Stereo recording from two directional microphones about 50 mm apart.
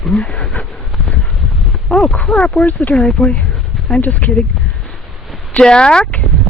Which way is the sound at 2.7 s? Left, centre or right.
Left.